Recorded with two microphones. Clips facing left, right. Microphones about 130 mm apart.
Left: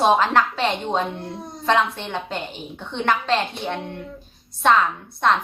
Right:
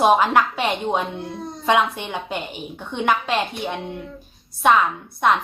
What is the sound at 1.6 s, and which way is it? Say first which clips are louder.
A woman's voice: right 1 dB; 10° right (ahead or behind).